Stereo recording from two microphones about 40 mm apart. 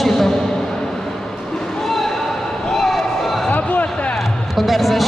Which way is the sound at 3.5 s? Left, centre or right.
Left.